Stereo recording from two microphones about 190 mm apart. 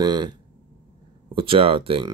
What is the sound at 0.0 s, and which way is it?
Speech, 20° right (ahead or behind).